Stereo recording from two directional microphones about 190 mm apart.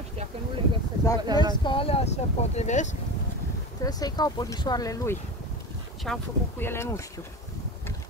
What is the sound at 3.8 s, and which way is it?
Speech, 20° left (ahead or behind).